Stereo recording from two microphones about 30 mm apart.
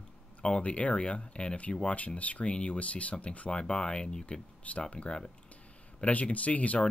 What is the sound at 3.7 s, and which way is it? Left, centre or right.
Speech, left.